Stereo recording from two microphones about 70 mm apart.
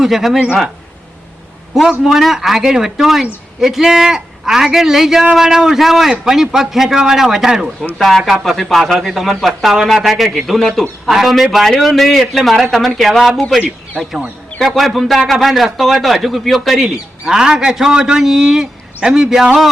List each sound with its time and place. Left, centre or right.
0.0 s speech: centre
2.0 s a man's voice: centre
14.7 s a man's voice: centre